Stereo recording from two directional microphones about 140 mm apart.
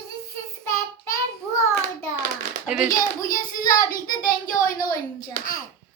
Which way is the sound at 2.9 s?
75° left (ahead or behind).